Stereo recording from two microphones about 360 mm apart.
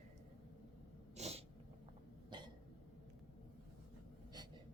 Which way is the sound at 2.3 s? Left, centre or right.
Centre.